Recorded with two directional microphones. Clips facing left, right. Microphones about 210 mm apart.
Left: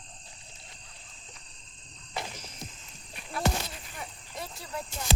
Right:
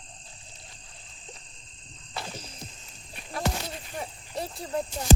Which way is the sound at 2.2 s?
20° left (ahead or behind).